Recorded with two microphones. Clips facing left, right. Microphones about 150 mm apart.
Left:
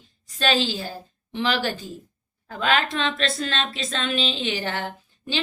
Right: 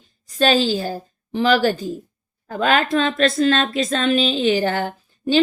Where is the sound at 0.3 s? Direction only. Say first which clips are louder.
Right 6 dB; 40° right (ahead or behind).